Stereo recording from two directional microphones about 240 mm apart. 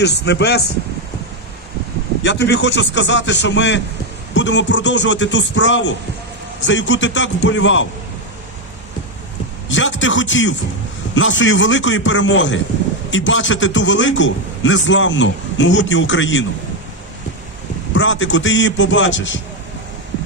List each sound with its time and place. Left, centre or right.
0.0 s a man's voice: left
2.2 s a man's voice: left
9.6 s a man's voice: left
17.9 s a man's voice: left